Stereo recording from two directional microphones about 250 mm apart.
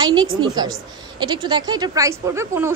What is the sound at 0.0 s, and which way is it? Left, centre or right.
A woman's voice, centre.